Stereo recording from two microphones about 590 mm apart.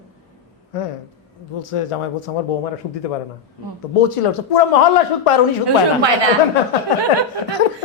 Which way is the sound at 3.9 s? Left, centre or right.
Left.